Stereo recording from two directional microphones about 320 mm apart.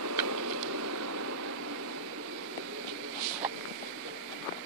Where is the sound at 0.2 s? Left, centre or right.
Right.